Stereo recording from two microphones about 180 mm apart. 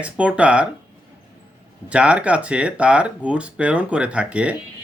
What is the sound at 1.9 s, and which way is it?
Speech, 5° right (ahead or behind).